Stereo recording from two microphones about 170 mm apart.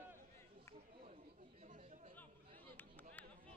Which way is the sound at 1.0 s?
40° right (ahead or behind).